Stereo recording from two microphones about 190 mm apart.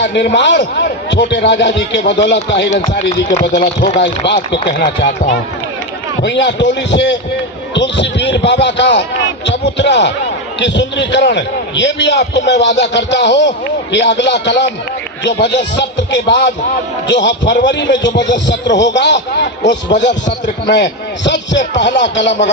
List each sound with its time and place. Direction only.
0.0 s speech: 65° left (ahead or behind)
6.2 s speech: 70° left (ahead or behind)